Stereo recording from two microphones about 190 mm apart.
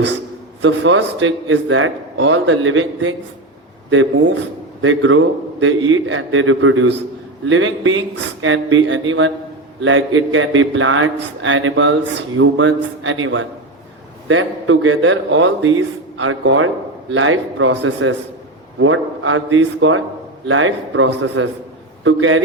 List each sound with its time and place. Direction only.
0.6 s a man's voice: 85° right
4.8 s a man's voice: 90° right